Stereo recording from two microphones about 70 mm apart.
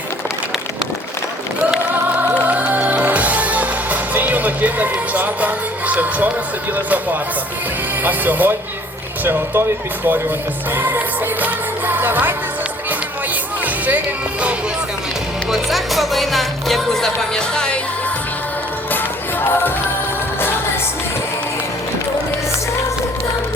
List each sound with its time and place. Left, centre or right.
1.9 s music: right
8.0 s speech: right
10.8 s music: right
15.4 s music: centre